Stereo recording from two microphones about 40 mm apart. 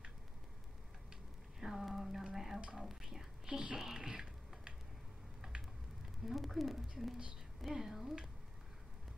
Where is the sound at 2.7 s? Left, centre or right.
Centre.